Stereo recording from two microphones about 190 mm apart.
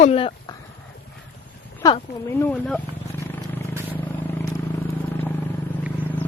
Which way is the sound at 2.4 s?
5° left (ahead or behind).